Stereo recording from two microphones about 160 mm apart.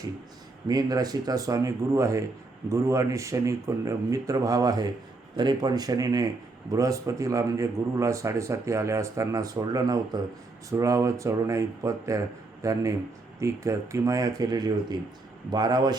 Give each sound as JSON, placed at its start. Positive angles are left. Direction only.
{"t": 0.7, "sound": "a man's voice", "side_deg": -25}